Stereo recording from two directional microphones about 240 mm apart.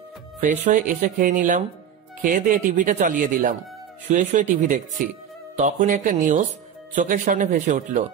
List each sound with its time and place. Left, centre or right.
0.4 s speech: right